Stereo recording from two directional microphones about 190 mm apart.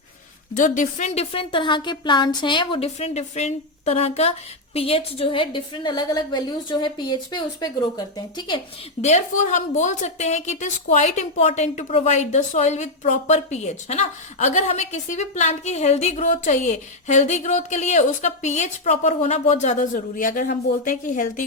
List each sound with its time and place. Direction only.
0.5 s a woman's voice: 45° left (ahead or behind); by 8.6 s 25° left (ahead or behind)
9.0 s a woman's voice: 35° left (ahead or behind)